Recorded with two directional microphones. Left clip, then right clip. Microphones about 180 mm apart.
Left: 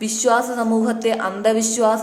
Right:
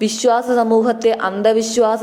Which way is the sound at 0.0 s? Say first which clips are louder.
Right 2 dB; 35° right (ahead or behind).